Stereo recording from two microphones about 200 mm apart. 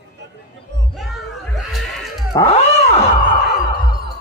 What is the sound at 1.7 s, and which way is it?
Music, centre (ahead or behind).